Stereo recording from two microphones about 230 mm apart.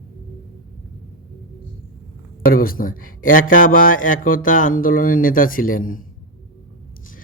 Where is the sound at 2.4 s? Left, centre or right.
Left.